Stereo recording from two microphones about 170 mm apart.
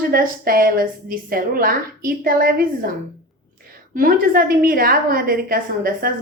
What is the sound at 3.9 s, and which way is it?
A woman's voice, 55° right (ahead or behind).